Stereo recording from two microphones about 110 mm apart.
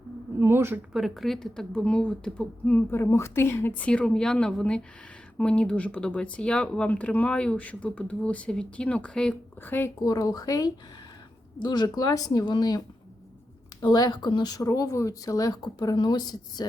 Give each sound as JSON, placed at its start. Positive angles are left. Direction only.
{"t": 0.3, "sound": "a sound", "side_deg": -20}
{"t": 0.9, "sound": "a woman's voice", "side_deg": 0}
{"t": 3.0, "sound": "speech", "side_deg": 25}
{"t": 9.6, "sound": "a woman's voice", "side_deg": 20}
{"t": 10.0, "sound": "speech", "side_deg": 35}
{"t": 13.8, "sound": "speech", "side_deg": 40}